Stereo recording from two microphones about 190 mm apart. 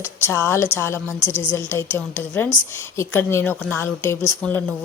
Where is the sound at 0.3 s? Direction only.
15° left (ahead or behind).